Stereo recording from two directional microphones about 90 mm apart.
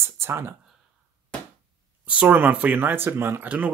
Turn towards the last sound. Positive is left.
turn(degrees=-15)  # may be behind; listen again after turning